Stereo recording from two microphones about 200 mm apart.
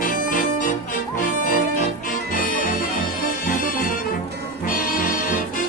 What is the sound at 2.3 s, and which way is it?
Music, 45° left (ahead or behind).